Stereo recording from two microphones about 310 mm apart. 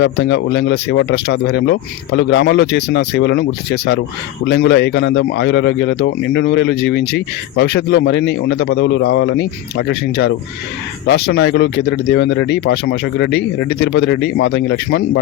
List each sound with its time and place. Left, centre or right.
0.0 s a man's voice: left